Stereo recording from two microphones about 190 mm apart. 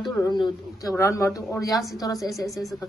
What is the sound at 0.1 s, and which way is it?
Speech, 20° left (ahead or behind).